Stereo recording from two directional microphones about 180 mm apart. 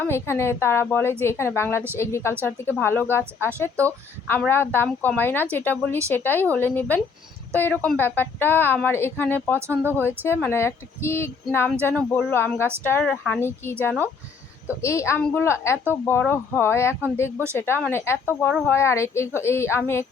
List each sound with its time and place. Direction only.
0.1 s speech: 15° left (ahead or behind)
9.6 s speech: 15° right (ahead or behind)
10.2 s speech: 15° left (ahead or behind)
17.3 s speech: 15° right (ahead or behind)
17.8 s speech: 15° left (ahead or behind)